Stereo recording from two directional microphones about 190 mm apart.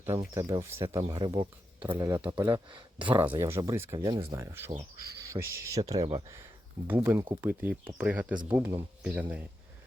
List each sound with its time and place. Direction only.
0.0 s speech: 15° right (ahead or behind)
2.4 s speech: 25° right (ahead or behind)
3.0 s speech: 10° right (ahead or behind); by 6.2 s 25° right (ahead or behind)
6.2 s speech: 15° right (ahead or behind)